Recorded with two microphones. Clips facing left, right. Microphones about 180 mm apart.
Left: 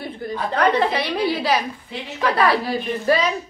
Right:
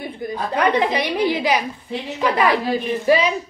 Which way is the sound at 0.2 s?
15° right (ahead or behind).